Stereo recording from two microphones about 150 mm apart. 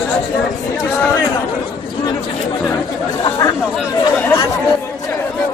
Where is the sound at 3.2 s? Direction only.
25° left (ahead or behind).